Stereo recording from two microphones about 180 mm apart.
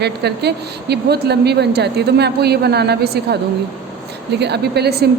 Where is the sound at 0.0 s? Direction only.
65° right (ahead or behind).